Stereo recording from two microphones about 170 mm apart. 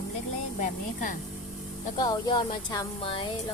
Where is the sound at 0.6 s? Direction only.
50° left (ahead or behind).